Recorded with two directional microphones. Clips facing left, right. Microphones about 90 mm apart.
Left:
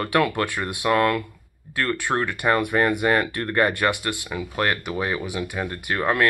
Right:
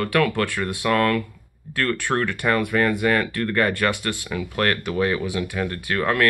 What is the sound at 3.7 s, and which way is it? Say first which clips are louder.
Speech: even; 10° left (ahead or behind).